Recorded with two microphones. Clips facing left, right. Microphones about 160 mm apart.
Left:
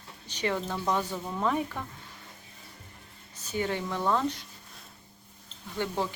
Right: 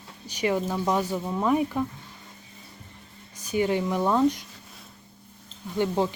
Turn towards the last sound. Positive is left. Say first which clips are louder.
# right 6 dB
turn(degrees=-20)  # may be behind; listen again after turning